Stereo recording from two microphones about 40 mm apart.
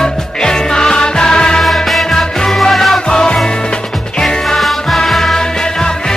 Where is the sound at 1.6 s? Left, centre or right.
Centre.